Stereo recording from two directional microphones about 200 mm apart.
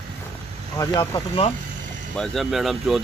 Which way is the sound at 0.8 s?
20° left (ahead or behind).